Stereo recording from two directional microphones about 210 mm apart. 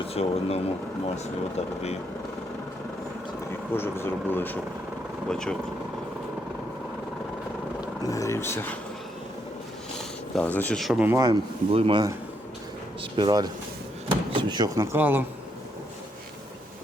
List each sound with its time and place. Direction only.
0.1 s speech: 30° left (ahead or behind)
3.7 s speech: 10° left (ahead or behind)
8.0 s speech: 15° left (ahead or behind)
10.3 s speech: 10° left (ahead or behind); by 11.3 s 15° right (ahead or behind)
11.7 s speech: 25° right (ahead or behind)
14.1 s door: 20° right (ahead or behind)